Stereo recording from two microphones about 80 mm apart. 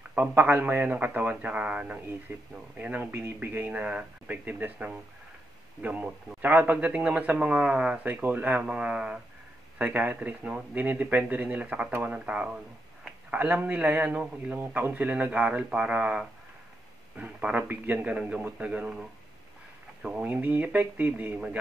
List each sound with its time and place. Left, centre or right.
0.1 s a man's voice: right